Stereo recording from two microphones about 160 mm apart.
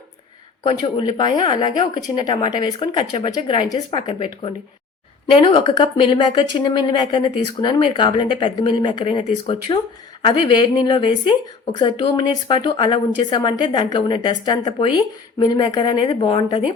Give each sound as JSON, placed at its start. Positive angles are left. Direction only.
{"t": 0.6, "sound": "a woman's voice", "side_deg": 30}